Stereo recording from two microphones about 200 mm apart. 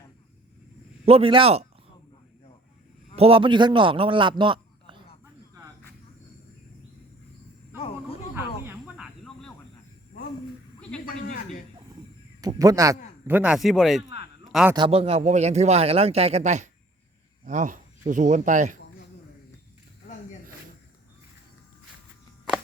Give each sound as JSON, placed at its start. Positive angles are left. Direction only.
{"t": 1.0, "sound": "a man's voice", "side_deg": -30}
{"t": 3.2, "sound": "a man's voice", "side_deg": -30}
{"t": 7.8, "sound": "a sound", "side_deg": 30}
{"t": 8.6, "sound": "snake", "side_deg": -10}
{"t": 12.4, "sound": "a man's voice", "side_deg": -15}
{"t": 14.8, "sound": "speech", "side_deg": -30}